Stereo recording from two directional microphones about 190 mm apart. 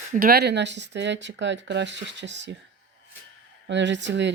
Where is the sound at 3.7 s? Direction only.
70° right (ahead or behind).